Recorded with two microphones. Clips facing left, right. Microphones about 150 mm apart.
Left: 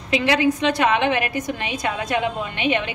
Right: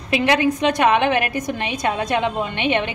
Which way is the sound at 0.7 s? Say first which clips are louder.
Right 2 dB; 20° right (ahead or behind).